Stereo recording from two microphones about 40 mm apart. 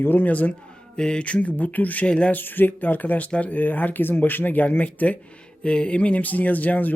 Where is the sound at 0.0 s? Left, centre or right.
Left.